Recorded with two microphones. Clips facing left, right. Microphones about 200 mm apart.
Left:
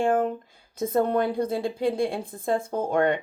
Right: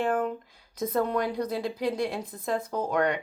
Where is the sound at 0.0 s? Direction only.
30° left (ahead or behind).